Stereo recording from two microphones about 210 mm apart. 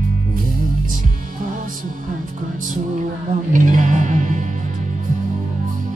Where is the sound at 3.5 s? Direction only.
40° right (ahead or behind).